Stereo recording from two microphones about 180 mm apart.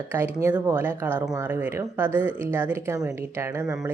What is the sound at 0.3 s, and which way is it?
Speech, 10° right (ahead or behind).